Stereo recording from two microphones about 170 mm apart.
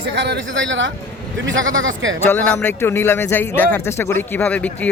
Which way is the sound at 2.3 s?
10° left (ahead or behind).